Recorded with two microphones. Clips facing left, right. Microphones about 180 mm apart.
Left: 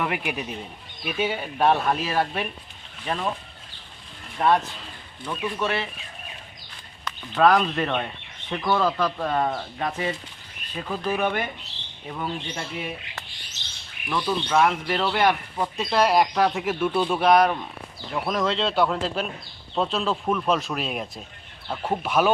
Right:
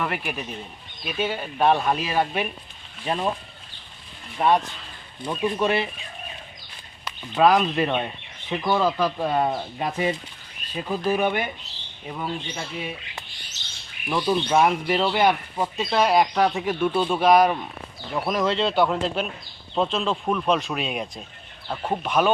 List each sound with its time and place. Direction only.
0.0 s speech: 15° left (ahead or behind)
3.0 s speech: 15° right (ahead or behind)
4.4 s speech: centre (ahead or behind)
5.5 s speech: 15° right (ahead or behind)
7.0 s speech: 10° right (ahead or behind)
14.1 s speech: 15° right (ahead or behind); by 22.3 s 5° left (ahead or behind)